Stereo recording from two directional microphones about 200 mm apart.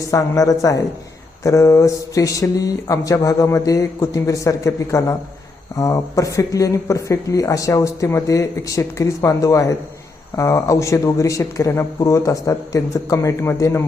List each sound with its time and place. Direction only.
0.0 s speech: 15° left (ahead or behind)